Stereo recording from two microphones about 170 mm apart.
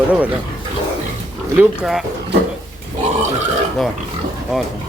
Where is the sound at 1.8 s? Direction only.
Centre (ahead or behind).